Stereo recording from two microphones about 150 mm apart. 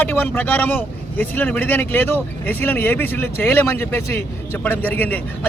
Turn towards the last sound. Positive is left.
turn(degrees=10)  # may be behind; listen again after turning